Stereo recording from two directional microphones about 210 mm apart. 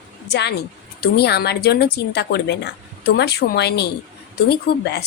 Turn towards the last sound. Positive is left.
turn(degrees=50)  # may be behind; listen again after turning